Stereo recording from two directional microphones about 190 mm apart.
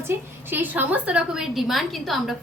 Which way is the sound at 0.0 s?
10° right (ahead or behind).